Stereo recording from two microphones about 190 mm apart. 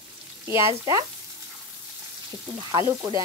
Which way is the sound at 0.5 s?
15° right (ahead or behind).